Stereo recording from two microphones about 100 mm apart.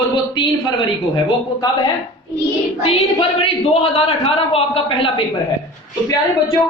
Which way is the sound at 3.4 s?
75° left (ahead or behind).